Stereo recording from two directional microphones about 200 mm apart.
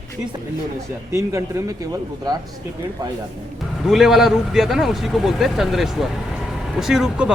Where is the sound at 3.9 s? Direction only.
Centre (ahead or behind).